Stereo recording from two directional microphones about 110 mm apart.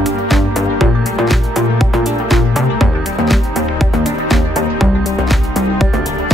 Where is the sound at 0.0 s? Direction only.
Centre (ahead or behind).